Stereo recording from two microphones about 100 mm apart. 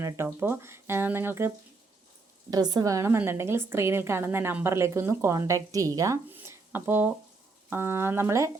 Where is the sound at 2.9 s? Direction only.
25° right (ahead or behind).